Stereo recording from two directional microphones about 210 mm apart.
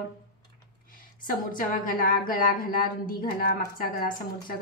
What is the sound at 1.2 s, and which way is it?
A woman's voice, 40° left (ahead or behind).